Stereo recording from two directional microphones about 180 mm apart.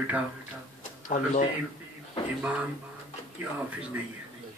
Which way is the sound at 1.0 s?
45° left (ahead or behind).